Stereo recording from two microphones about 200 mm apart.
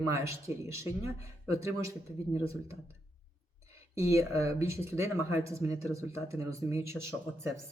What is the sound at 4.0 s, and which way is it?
Speech, 15° right (ahead or behind).